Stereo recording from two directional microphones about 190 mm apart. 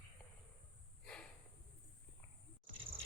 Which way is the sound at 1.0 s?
5° left (ahead or behind).